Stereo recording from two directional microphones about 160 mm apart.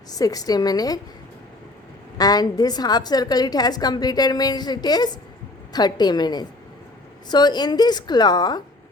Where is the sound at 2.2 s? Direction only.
25° left (ahead or behind).